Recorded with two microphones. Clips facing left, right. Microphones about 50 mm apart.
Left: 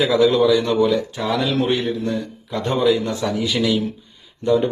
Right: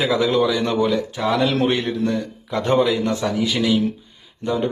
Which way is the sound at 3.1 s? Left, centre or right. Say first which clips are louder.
Right 1 dB; right.